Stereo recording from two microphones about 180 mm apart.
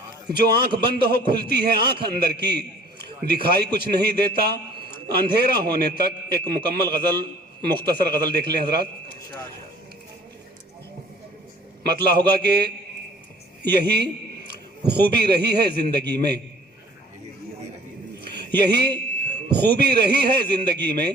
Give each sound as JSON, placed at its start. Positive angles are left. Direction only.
{"t": 0.3, "sound": "a man's voice", "side_deg": -60}
{"t": 11.9, "sound": "a man's voice", "side_deg": -60}
{"t": 13.7, "sound": "a sound", "side_deg": -60}
{"t": 15.1, "sound": "a man's voice", "side_deg": -60}
{"t": 18.3, "sound": "a man's voice", "side_deg": -60}